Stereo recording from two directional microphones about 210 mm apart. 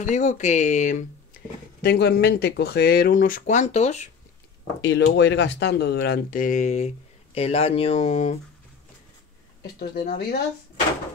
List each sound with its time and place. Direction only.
0.0 s speech: 35° left (ahead or behind)
1.8 s speech: 50° left (ahead or behind); by 4.1 s 35° left (ahead or behind)
4.8 s speech: 55° left (ahead or behind); by 8.4 s 30° left (ahead or behind)
9.8 s speech: 45° left (ahead or behind)